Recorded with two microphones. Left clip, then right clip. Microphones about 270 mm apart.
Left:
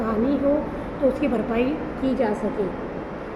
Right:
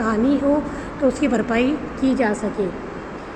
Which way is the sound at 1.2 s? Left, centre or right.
Right.